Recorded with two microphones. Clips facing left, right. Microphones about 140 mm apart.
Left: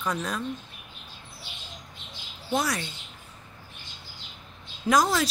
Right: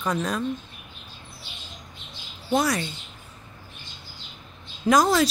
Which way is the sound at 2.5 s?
Centre (ahead or behind).